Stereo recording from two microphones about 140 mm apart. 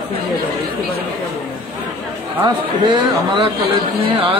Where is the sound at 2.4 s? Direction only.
35° right (ahead or behind).